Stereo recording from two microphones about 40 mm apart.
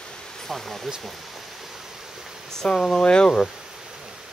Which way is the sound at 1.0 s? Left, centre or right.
Centre.